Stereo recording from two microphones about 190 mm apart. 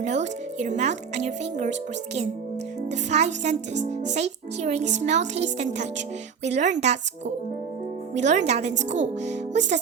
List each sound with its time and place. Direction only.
0.0 s a child's voice: 35° right (ahead or behind)
2.9 s a child's voice: 35° right (ahead or behind)